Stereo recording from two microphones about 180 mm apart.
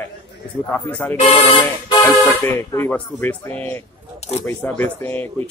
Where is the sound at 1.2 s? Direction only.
35° left (ahead or behind).